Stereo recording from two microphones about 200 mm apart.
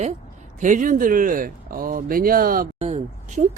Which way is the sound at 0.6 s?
40° right (ahead or behind).